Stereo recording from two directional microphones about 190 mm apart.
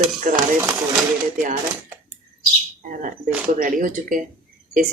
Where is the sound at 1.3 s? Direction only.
45° right (ahead or behind).